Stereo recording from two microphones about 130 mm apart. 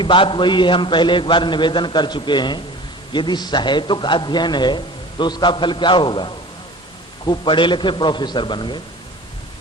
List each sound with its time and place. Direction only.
0.0 s a man's voice: 40° left (ahead or behind)